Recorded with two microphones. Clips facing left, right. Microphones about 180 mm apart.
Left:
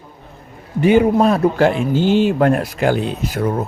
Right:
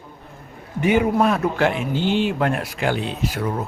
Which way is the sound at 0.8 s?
30° left (ahead or behind).